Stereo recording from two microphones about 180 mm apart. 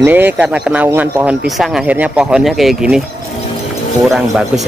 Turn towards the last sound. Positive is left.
turn(degrees=0)  # may be behind; listen again after turning